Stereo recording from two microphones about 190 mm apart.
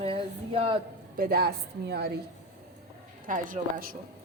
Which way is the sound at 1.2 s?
55° right (ahead or behind).